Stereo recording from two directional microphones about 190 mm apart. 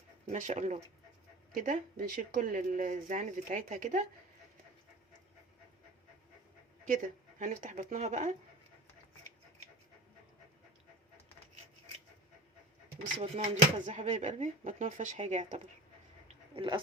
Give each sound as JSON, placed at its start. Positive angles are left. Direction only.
{"t": 0.3, "sound": "speech", "side_deg": -40}
{"t": 6.9, "sound": "speech", "side_deg": -45}
{"t": 13.1, "sound": "speech", "side_deg": -30}
{"t": 16.6, "sound": "speech", "side_deg": -25}